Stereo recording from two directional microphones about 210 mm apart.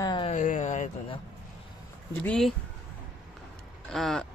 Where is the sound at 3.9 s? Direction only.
Centre (ahead or behind).